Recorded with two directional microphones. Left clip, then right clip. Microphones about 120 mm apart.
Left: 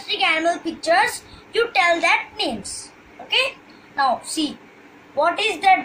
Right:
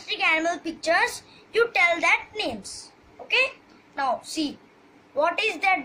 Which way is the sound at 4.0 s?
45° right (ahead or behind).